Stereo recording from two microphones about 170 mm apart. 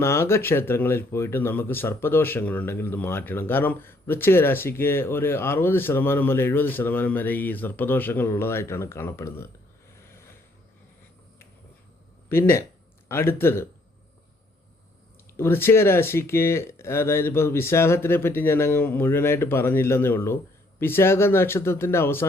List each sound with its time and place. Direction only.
0.0 s speech: 15° left (ahead or behind)
10.1 s vehicle: 15° left (ahead or behind)
12.3 s speech: 15° left (ahead or behind)
15.4 s speech: 15° left (ahead or behind)